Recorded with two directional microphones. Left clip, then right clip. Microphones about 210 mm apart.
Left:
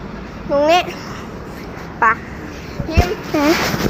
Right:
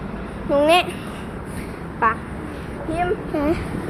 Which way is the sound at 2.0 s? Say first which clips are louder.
Left 5 dB; 10° left (ahead or behind).